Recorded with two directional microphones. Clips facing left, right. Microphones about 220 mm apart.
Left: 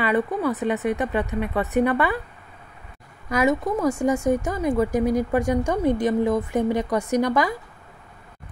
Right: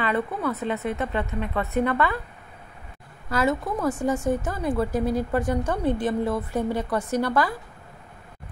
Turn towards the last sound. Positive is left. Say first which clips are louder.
# left 3 dB
turn(degrees=15)  # may be behind; listen again after turning